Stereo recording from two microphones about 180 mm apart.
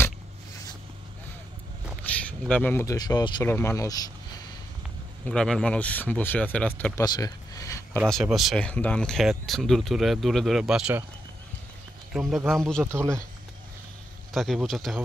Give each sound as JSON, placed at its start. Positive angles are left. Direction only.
{"t": 2.0, "sound": "speech", "side_deg": 5}
{"t": 5.2, "sound": "speech", "side_deg": 5}
{"t": 8.1, "sound": "speech", "side_deg": 0}
{"t": 12.1, "sound": "speech", "side_deg": 0}
{"t": 12.8, "sound": "speech", "side_deg": -15}
{"t": 14.3, "sound": "speech", "side_deg": 0}